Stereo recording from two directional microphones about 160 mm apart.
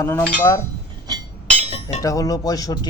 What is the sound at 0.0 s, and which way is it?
Speech, 15° left (ahead or behind).